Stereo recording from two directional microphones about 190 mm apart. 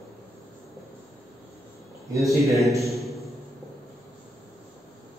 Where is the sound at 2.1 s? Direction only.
15° right (ahead or behind).